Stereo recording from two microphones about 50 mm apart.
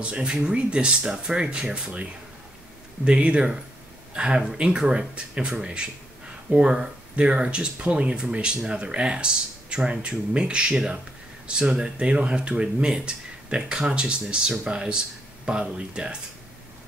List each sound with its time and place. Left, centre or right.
0.0 s speech: centre
3.1 s speech: right